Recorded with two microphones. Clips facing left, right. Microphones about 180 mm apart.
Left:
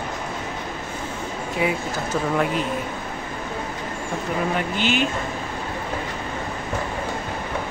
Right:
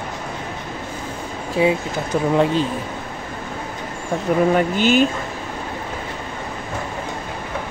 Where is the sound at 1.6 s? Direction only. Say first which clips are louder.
Right 6 dB; 30° right (ahead or behind).